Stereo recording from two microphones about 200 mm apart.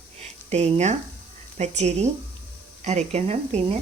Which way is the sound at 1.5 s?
35° right (ahead or behind).